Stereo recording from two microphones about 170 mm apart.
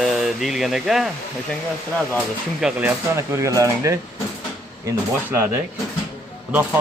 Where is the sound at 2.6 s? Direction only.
5° right (ahead or behind).